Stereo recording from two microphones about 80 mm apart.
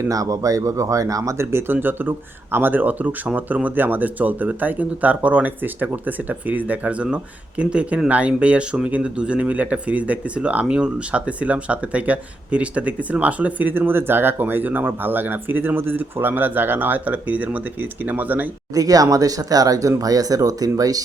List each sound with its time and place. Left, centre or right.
0.0 s speech: right
18.7 s speech: right